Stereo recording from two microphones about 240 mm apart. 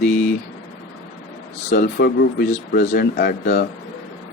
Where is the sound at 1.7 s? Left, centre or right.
Left.